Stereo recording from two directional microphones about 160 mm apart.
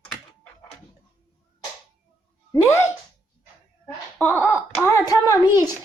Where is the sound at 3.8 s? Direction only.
10° left (ahead or behind).